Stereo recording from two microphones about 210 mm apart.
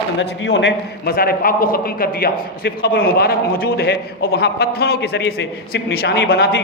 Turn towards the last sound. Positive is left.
turn(degrees=50)  # may be behind; listen again after turning